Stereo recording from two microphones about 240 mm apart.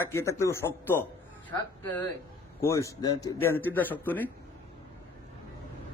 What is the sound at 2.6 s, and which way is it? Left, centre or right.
Speech, centre.